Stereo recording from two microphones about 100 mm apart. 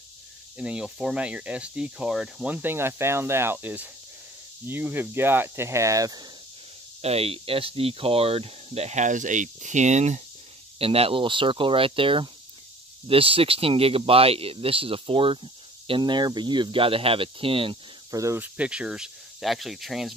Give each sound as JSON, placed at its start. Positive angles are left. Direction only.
{"t": 0.6, "sound": "speech", "side_deg": -10}
{"t": 7.0, "sound": "speech", "side_deg": -85}
{"t": 10.8, "sound": "speech", "side_deg": -75}
{"t": 16.0, "sound": "speech", "side_deg": -50}
{"t": 18.1, "sound": "speech", "side_deg": -30}
{"t": 18.4, "sound": "speech", "side_deg": -10}